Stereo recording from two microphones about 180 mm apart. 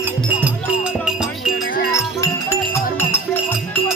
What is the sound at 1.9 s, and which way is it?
Music, 15° left (ahead or behind).